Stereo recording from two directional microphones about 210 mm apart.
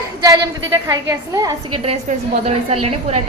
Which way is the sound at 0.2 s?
15° right (ahead or behind).